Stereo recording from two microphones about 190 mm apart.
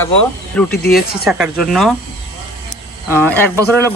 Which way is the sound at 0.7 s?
55° left (ahead or behind).